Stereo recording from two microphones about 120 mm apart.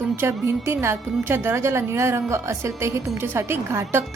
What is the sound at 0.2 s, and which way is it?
A woman's voice, 20° right (ahead or behind).